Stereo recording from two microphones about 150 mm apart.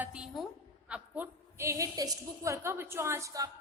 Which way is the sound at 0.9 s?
10° right (ahead or behind).